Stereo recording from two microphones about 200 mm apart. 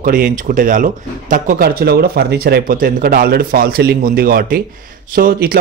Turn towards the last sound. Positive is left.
turn(degrees=-45)  # may be behind; listen again after turning